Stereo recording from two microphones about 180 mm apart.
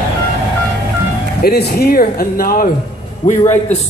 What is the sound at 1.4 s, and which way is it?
Speech, 60° left (ahead or behind).